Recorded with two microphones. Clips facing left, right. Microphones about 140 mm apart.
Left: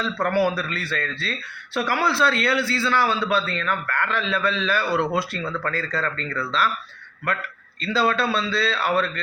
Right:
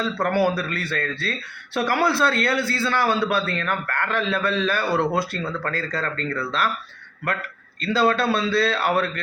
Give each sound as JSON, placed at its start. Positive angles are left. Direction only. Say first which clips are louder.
{"t": 0.2, "sound": "speech", "louder": "even", "side_deg": -50}
{"t": 7.8, "sound": "speech", "louder": "right 2 dB", "side_deg": -50}